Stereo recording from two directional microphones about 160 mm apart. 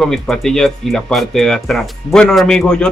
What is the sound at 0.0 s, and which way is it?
Speech, centre (ahead or behind).